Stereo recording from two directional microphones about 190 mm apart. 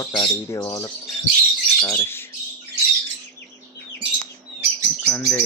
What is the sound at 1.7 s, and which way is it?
Bird, 15° left (ahead or behind).